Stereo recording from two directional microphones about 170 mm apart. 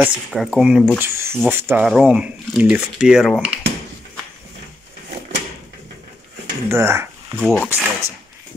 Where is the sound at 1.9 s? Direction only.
5° right (ahead or behind).